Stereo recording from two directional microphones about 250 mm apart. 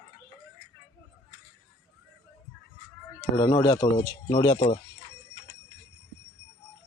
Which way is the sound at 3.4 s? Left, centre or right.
Centre.